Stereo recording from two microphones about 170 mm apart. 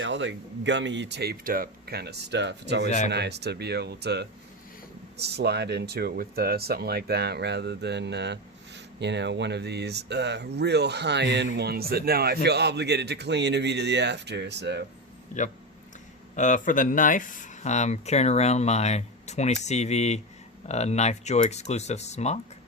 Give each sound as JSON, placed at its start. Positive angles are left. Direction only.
{"t": 0.0, "sound": "speech", "side_deg": -90}
{"t": 2.8, "sound": "speech", "side_deg": 45}
{"t": 3.1, "sound": "speech", "side_deg": -80}
{"t": 15.3, "sound": "speech", "side_deg": 45}